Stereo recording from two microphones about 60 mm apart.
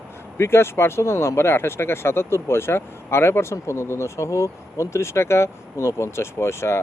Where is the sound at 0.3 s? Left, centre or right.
Left.